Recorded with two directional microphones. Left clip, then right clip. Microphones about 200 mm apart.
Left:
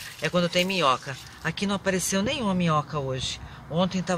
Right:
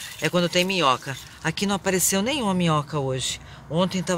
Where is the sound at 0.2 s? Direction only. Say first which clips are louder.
Right 2 dB; 55° right (ahead or behind).